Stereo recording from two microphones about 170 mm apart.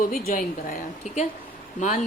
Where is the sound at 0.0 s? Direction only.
60° left (ahead or behind).